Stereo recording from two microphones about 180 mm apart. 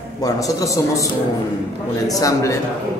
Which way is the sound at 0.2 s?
20° left (ahead or behind).